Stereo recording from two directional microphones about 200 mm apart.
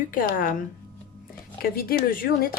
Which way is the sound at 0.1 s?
45° left (ahead or behind).